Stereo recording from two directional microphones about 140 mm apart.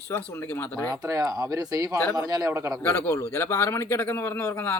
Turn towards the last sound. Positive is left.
turn(degrees=15)  # may be behind; listen again after turning